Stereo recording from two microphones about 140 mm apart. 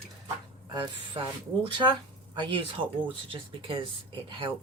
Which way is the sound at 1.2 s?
35° right (ahead or behind).